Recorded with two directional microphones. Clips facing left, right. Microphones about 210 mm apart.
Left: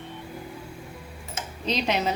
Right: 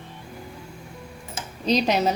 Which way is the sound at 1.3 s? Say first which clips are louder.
Right 6 dB; 40° right (ahead or behind).